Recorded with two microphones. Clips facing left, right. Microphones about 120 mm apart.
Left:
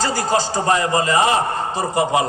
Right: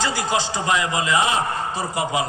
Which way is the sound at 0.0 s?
40° left (ahead or behind).